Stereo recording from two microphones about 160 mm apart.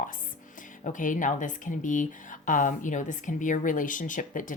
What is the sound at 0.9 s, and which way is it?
Speech, 55° left (ahead or behind).